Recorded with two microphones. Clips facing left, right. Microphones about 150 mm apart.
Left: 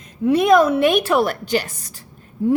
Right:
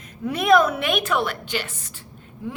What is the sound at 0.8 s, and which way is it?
A woman's voice, 35° left (ahead or behind).